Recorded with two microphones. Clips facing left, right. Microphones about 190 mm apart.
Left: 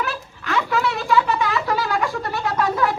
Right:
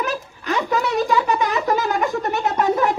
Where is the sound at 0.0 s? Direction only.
20° right (ahead or behind).